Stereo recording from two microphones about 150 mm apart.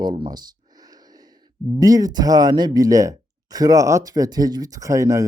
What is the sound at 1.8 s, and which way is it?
Speech, 25° right (ahead or behind).